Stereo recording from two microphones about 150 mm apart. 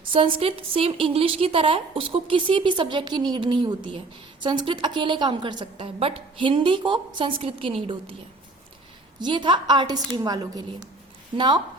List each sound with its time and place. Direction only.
0.1 s a woman's voice: 35° right (ahead or behind)
9.1 s a woman's voice: 30° right (ahead or behind)